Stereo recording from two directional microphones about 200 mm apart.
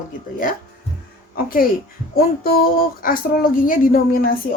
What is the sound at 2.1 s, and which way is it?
Speech, 45° left (ahead or behind).